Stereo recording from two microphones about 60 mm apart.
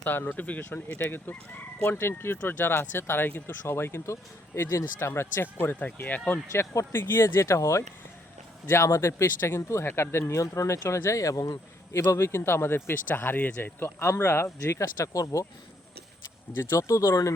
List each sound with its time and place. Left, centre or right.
0.0 s speech: left
0.7 s speech: left
6.5 s speech: left
6.9 s speech: left
11.9 s speech: left
14.6 s speech: left
16.7 s speech: left